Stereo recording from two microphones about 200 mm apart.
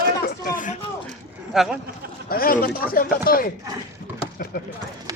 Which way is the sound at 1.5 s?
Centre (ahead or behind).